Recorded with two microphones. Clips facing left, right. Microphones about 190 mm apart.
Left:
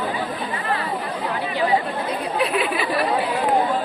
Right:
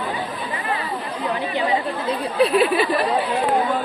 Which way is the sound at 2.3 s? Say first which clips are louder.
Right 7 dB; 30° right (ahead or behind).